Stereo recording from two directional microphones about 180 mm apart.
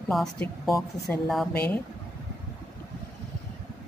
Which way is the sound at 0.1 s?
Centre (ahead or behind).